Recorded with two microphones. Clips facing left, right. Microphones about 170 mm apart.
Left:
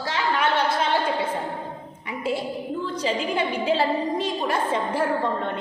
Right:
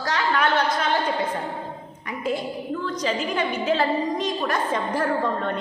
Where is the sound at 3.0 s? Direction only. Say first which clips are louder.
Left 1 dB; 30° left (ahead or behind).